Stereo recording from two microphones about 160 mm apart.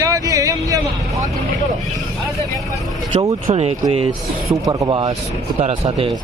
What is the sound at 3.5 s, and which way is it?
Speech, 40° right (ahead or behind).